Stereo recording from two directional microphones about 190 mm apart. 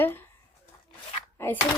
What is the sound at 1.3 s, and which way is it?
Speech, 10° left (ahead or behind).